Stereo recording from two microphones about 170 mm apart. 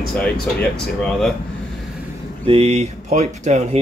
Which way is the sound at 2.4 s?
35° right (ahead or behind).